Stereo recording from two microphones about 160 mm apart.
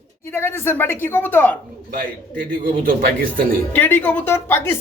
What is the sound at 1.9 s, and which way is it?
A man's voice, 60° right (ahead or behind).